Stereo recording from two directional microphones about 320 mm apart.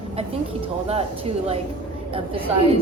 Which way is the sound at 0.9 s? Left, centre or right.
Centre.